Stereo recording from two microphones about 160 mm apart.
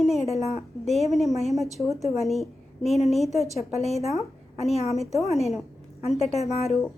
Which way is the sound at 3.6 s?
45° left (ahead or behind).